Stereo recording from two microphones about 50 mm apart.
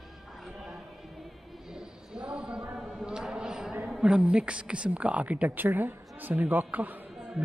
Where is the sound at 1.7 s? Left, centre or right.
Centre.